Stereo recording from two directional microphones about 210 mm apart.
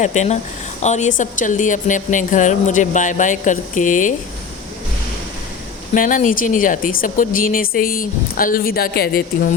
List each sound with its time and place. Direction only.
0.0 s speech: 35° left (ahead or behind)
5.9 s speech: 40° left (ahead or behind)